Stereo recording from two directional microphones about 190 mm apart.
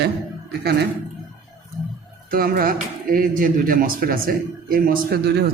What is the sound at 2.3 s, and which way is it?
A man's voice, 50° right (ahead or behind).